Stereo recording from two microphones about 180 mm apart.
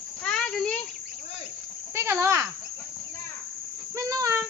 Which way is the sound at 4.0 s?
15° right (ahead or behind).